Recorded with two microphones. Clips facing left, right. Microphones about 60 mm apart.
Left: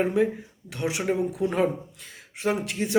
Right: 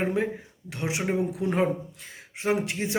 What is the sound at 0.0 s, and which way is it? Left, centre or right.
Speech, right.